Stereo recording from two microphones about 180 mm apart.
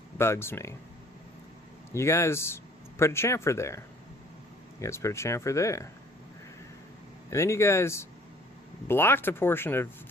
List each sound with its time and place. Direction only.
0.2 s speech: 15° left (ahead or behind)
1.9 s speech: 15° left (ahead or behind)
7.3 s speech: 15° left (ahead or behind)